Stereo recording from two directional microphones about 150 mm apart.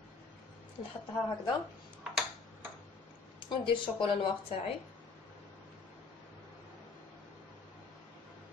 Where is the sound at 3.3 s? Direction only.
35° left (ahead or behind).